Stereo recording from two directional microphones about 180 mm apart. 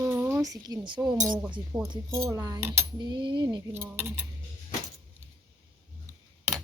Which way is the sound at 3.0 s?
25° right (ahead or behind).